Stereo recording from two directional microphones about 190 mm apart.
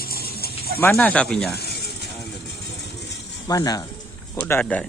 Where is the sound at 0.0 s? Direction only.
50° left (ahead or behind).